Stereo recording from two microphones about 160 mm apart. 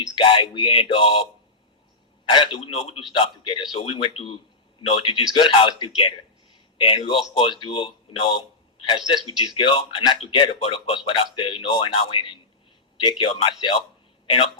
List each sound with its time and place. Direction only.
0.2 s speech: 30° left (ahead or behind)
2.3 s a man's voice: 30° left (ahead or behind)